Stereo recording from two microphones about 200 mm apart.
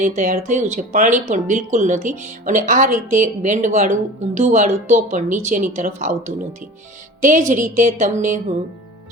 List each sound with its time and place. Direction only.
0.0 s speech: 40° right (ahead or behind)